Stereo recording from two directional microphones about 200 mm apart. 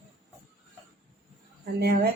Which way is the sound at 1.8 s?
50° right (ahead or behind).